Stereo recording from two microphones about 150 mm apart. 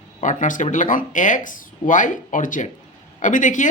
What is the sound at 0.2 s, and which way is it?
Speech, 55° left (ahead or behind).